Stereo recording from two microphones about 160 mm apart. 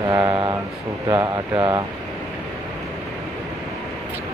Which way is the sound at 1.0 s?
25° right (ahead or behind).